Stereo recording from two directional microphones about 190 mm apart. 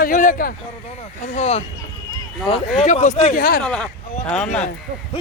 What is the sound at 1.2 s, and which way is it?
Speech, 35° left (ahead or behind).